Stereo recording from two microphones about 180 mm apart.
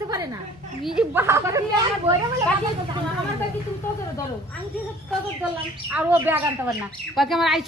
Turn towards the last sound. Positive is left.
turn(degrees=0)  # may be behind; listen again after turning